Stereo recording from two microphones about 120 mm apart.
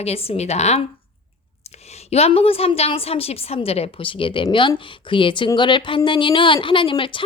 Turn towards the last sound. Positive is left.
turn(degrees=45)  # may be behind; listen again after turning